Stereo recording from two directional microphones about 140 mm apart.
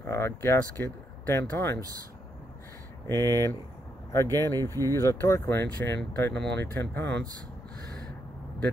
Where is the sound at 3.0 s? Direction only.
20° left (ahead or behind).